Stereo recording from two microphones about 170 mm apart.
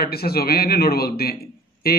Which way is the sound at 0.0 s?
65° left (ahead or behind).